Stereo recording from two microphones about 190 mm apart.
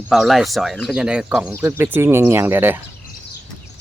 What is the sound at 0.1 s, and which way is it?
Speech, centre (ahead or behind).